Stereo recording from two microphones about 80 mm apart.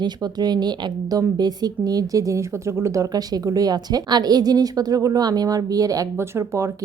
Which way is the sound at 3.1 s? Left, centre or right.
Right.